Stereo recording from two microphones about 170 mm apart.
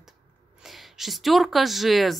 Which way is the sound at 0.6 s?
Centre (ahead or behind).